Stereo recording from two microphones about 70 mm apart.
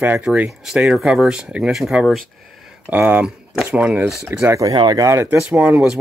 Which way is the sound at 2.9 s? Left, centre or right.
Right.